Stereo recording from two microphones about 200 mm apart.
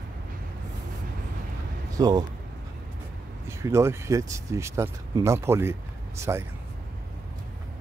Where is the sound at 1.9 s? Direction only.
20° right (ahead or behind).